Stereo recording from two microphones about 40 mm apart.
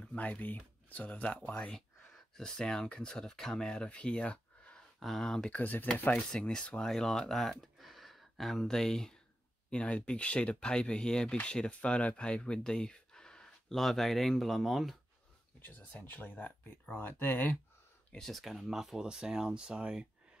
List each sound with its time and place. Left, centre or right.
0.2 s speech: left
2.3 s speech: centre
3.9 s speech: left
5.0 s speech: centre
5.5 s speech: left
6.5 s speech: left; by 8.6 s centre
8.6 s speech: centre
9.7 s speech: left
12.6 s a sound: centre
13.7 s speech: centre
15.6 s speech: left
18.2 s speech: centre; by 20.1 s right